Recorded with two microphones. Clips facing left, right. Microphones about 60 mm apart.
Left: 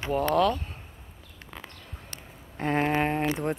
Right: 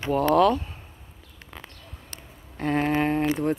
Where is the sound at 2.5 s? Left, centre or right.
Centre.